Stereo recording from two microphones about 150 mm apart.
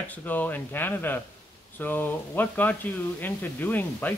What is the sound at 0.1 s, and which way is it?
Speech, 10° left (ahead or behind).